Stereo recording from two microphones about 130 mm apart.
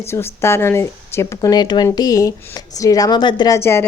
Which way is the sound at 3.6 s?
20° left (ahead or behind).